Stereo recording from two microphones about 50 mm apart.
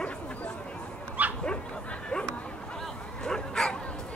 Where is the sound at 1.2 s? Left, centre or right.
Right.